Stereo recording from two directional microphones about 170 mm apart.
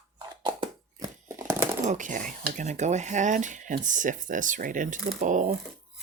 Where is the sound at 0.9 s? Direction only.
20° right (ahead or behind).